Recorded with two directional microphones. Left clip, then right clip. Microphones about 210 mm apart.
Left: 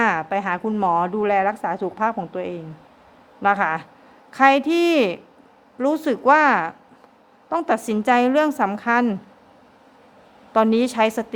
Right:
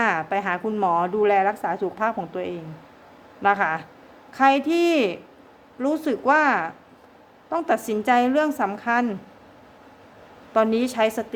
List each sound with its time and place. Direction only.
0.0 s a woman's voice: 25° left (ahead or behind)
10.5 s a woman's voice: 25° left (ahead or behind)